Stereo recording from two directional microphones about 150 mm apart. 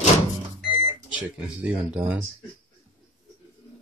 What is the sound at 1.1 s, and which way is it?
Speech, 10° right (ahead or behind).